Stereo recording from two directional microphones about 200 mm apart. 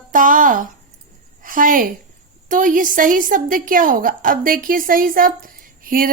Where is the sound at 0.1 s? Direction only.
45° right (ahead or behind).